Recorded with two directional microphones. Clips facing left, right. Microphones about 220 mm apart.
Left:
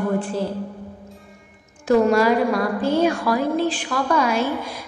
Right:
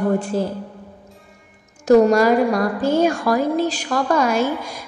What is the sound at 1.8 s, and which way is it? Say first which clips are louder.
A woman's voice: right 3 dB; 45° right (ahead or behind).